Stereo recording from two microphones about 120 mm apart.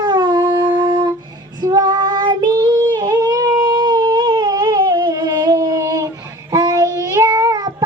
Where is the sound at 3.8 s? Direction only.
40° right (ahead or behind).